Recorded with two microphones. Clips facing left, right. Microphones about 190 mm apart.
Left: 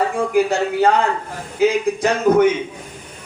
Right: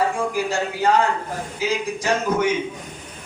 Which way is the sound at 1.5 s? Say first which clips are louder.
Left 9 dB; 60° left (ahead or behind).